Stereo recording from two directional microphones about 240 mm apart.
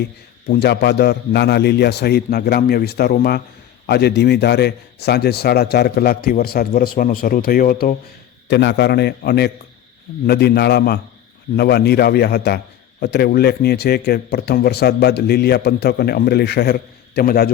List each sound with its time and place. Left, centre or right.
0.4 s a man's voice: left